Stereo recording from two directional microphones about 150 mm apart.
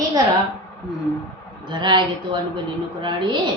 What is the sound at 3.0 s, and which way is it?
Speech, 30° right (ahead or behind).